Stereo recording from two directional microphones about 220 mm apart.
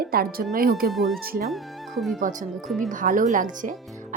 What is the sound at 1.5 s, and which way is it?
Speech, centre (ahead or behind).